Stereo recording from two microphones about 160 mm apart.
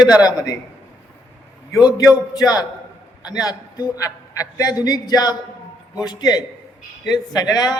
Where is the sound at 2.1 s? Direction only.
25° left (ahead or behind).